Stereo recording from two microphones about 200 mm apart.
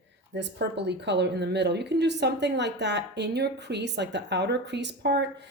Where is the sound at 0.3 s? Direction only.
60° right (ahead or behind).